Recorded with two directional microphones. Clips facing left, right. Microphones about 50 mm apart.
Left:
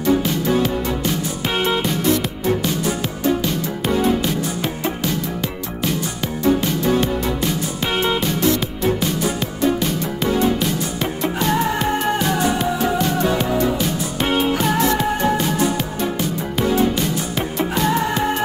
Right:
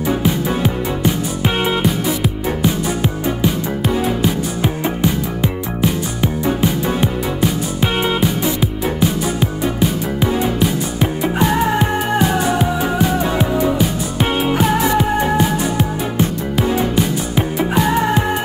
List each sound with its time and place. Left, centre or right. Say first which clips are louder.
0.0 s music: even; centre
5.0 s music: right 4 dB; centre
16.9 s music: right 4 dB; centre